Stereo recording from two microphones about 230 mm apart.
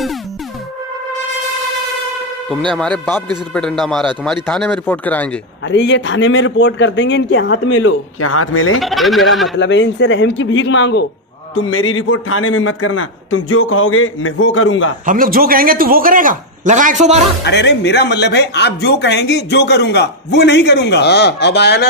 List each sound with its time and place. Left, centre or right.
2.7 s a man's voice: centre
5.7 s a man's voice: left
8.7 s a man's voice: centre
9.6 s speech: left
11.5 s a man's voice: left
15.0 s a man's voice: right
17.4 s speech: left